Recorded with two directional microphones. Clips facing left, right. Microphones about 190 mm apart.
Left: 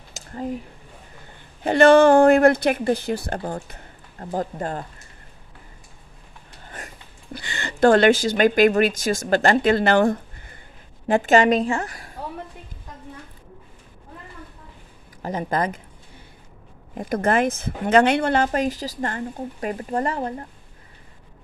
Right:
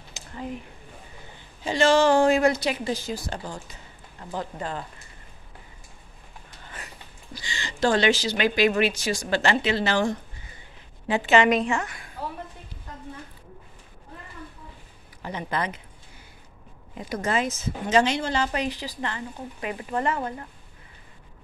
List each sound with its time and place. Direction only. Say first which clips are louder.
0.1 s a sound: left 5 dB; 45° left (ahead or behind)
1.6 s speech: left 7 dB; 60° left (ahead or behind)
4.3 s speech: left 5 dB; 45° left (ahead or behind)
7.3 s a woman's voice: left 6 dB; 60° left (ahead or behind); by 12.1 s 35° left (ahead or behind)
15.2 s speech: left 5 dB; 40° left (ahead or behind)
16.9 s speech: left 6 dB; 50° left (ahead or behind); by 20.4 s 35° left (ahead or behind)